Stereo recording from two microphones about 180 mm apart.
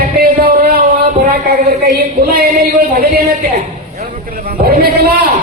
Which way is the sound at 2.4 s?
55° right (ahead or behind).